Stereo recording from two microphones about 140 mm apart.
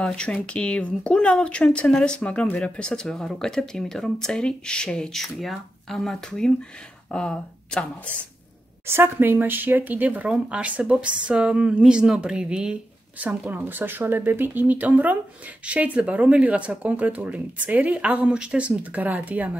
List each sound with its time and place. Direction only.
0.0 s speech: 5° left (ahead or behind)
8.8 s speech: 15° right (ahead or behind)